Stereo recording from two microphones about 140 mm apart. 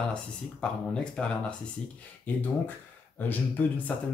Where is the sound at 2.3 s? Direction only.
10° left (ahead or behind).